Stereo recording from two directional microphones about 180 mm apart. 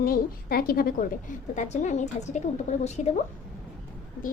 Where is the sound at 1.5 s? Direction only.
40° left (ahead or behind).